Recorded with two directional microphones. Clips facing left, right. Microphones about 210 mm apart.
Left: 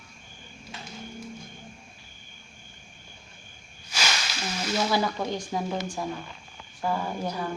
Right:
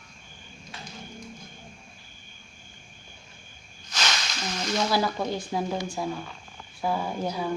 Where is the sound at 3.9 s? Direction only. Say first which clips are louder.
Even; 10° left (ahead or behind).